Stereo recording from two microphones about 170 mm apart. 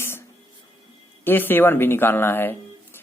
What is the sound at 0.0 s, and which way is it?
Music, 15° left (ahead or behind).